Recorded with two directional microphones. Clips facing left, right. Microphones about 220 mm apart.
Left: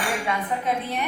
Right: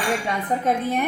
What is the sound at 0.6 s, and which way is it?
Speech, 50° right (ahead or behind).